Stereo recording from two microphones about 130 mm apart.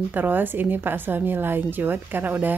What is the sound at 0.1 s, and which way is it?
Speech, 15° right (ahead or behind).